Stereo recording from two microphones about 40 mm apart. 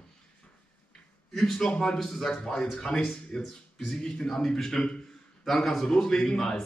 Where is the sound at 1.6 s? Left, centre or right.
Left.